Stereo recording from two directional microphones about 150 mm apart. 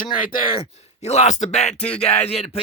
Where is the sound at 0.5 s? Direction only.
40° left (ahead or behind).